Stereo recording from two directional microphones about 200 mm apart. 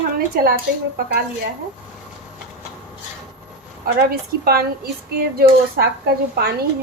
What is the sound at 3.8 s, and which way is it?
Speech, 50° right (ahead or behind).